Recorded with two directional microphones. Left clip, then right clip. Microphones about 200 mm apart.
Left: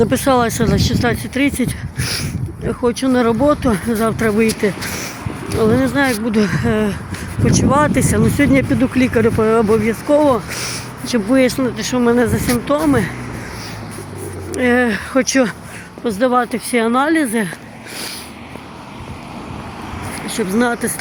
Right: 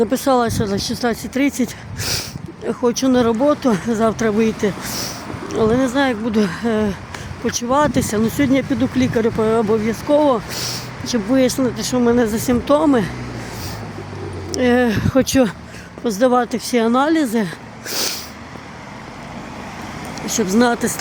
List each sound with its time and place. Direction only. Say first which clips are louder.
0.0 s speech: left 2 dB; centre (ahead or behind)
12.5 s speech: right 1 dB; 20° right (ahead or behind)
14.5 s speech: left 1 dB; 10° right (ahead or behind)
17.9 s a sound: right 6 dB; 45° right (ahead or behind)
20.2 s speech: right 1 dB; 25° right (ahead or behind)